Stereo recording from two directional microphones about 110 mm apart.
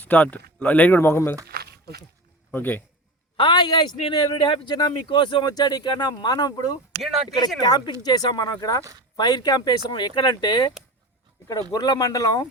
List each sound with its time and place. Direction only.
0.0 s speech: 15° left (ahead or behind)
2.5 s speech: 15° left (ahead or behind)
3.3 s a woman's voice: 45° left (ahead or behind)
4.0 s speech: 55° left (ahead or behind)
4.7 s speech: 40° left (ahead or behind)
8.8 s speech: 30° right (ahead or behind)
9.1 s speech: 40° left (ahead or behind)
11.7 s speech: 35° left (ahead or behind)